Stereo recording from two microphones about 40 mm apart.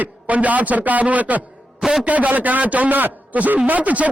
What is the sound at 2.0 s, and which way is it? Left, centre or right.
A man's voice, right.